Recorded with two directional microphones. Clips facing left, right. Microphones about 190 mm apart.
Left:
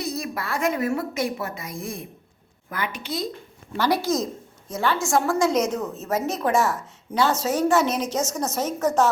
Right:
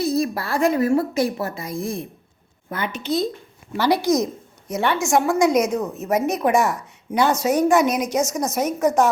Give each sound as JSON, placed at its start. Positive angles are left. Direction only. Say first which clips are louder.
{"t": 0.0, "sound": "a woman's voice", "louder": "right 8 dB", "side_deg": -35}
{"t": 3.7, "sound": "a woman's voice", "louder": "right 4 dB", "side_deg": -10}